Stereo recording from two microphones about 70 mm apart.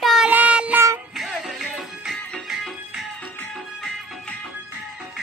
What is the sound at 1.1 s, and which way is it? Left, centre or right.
Music, centre.